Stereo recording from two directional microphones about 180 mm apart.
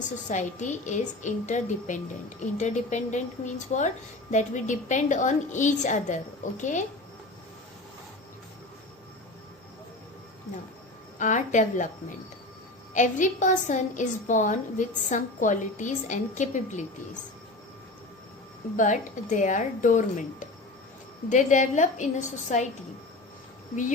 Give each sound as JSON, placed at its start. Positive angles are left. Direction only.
{"t": 0.3, "sound": "a woman's voice", "side_deg": 45}
{"t": 11.2, "sound": "a woman's voice", "side_deg": 45}
{"t": 18.8, "sound": "a woman's voice", "side_deg": 45}
{"t": 21.2, "sound": "a woman's voice", "side_deg": 45}